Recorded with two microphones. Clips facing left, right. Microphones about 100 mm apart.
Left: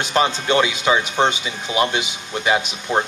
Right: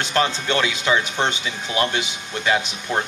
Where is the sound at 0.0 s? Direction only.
20° left (ahead or behind).